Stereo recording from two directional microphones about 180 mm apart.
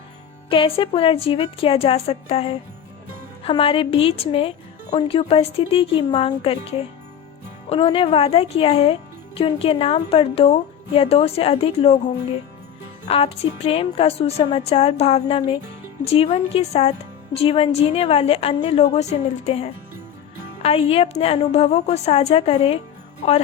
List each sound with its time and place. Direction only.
0.5 s speech: 30° left (ahead or behind)
13.1 s speech: 30° left (ahead or behind)